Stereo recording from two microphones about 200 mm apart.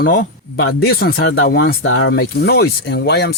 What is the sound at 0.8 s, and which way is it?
Speech, 50° left (ahead or behind).